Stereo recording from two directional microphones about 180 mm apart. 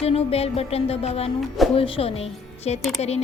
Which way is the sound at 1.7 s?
30° left (ahead or behind).